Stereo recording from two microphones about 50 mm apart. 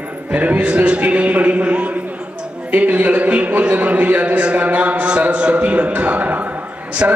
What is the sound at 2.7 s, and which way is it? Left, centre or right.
A man's voice, right.